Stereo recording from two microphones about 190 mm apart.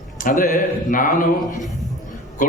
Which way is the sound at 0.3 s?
45° left (ahead or behind).